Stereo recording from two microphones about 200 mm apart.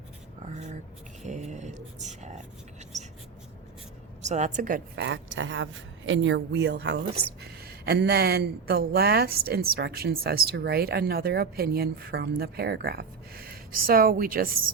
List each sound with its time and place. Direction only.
0.4 s a sound: 35° right (ahead or behind)
1.2 s speech: 35° right (ahead or behind)
4.2 s a woman's voice: 35° right (ahead or behind)
4.9 s speech: 65° right (ahead or behind); by 14.5 s 45° right (ahead or behind)